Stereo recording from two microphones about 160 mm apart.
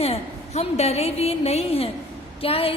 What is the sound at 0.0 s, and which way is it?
A woman's voice, 40° left (ahead or behind).